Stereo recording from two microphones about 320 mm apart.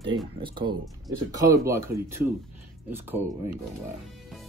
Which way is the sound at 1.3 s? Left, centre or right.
Centre.